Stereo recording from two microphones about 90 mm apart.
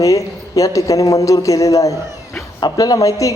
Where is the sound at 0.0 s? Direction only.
40° left (ahead or behind).